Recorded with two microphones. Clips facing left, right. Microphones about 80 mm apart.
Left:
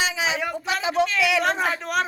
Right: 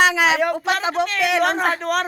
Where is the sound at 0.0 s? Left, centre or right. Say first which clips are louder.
Right 8 dB; right.